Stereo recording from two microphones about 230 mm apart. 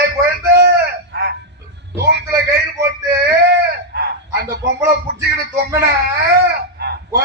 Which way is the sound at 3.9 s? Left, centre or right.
Right.